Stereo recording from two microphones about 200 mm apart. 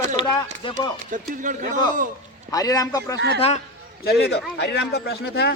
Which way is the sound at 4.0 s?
50° left (ahead or behind).